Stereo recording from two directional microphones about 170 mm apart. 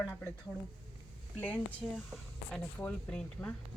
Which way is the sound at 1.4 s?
10° left (ahead or behind).